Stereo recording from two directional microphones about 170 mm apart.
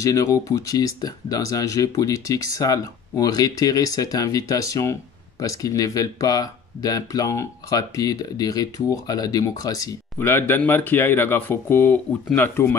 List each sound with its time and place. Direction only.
0.0 s speech: 20° left (ahead or behind)